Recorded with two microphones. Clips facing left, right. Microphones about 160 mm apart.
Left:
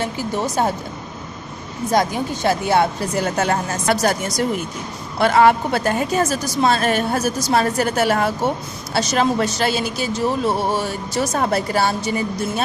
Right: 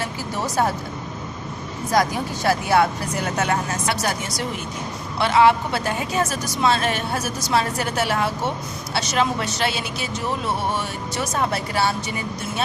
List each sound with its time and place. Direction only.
0.0 s speech: 20° left (ahead or behind)
1.9 s speech: 25° left (ahead or behind)
4.0 s a woman's voice: 45° left (ahead or behind)